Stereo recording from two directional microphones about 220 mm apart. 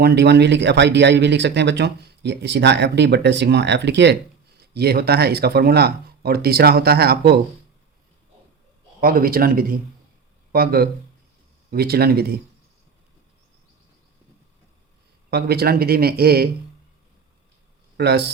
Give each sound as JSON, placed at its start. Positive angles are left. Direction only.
{"t": 0.0, "sound": "speech", "side_deg": -50}
{"t": 9.0, "sound": "speech", "side_deg": -40}
{"t": 15.3, "sound": "speech", "side_deg": -45}
{"t": 17.9, "sound": "speech", "side_deg": -50}